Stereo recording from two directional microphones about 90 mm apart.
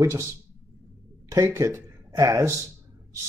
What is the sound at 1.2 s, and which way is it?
Speech, 35° right (ahead or behind).